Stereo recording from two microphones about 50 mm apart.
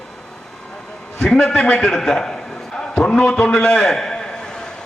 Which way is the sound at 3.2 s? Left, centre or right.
Left.